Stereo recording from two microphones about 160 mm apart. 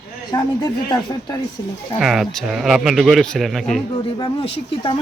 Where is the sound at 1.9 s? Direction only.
Centre (ahead or behind).